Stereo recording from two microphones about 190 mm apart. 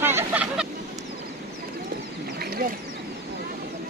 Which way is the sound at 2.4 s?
50° right (ahead or behind).